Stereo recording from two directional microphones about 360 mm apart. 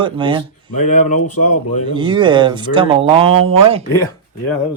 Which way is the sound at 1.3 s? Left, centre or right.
Left.